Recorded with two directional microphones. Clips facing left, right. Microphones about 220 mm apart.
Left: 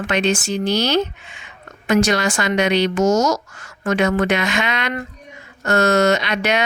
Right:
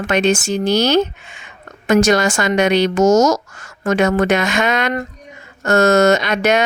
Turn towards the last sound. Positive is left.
turn(degrees=-45)  # may be behind; listen again after turning